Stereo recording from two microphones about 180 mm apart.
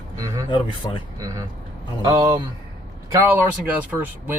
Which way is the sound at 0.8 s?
20° left (ahead or behind).